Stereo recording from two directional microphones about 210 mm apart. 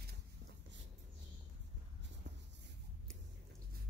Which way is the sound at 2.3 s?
55° right (ahead or behind).